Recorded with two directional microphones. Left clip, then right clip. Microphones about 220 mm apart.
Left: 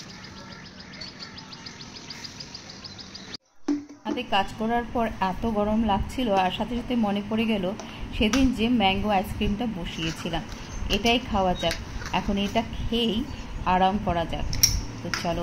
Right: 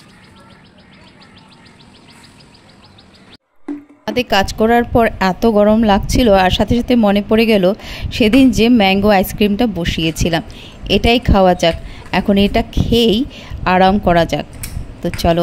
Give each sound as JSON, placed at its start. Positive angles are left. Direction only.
{"t": 4.0, "sound": "a woman's voice", "side_deg": -55}